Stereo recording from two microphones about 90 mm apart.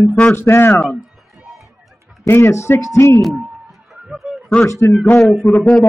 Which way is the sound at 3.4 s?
15° right (ahead or behind).